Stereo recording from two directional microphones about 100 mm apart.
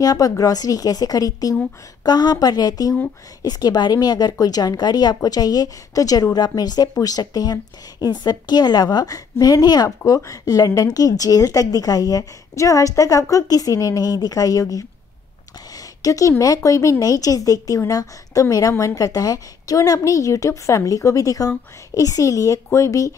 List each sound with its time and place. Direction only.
0.0 s a woman's voice: 35° left (ahead or behind)